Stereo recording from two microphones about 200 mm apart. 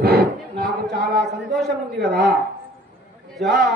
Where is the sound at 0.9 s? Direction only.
Centre (ahead or behind).